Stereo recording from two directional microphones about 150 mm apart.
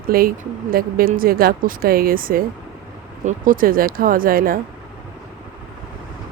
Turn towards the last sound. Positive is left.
turn(degrees=-75)  # may be behind; listen again after turning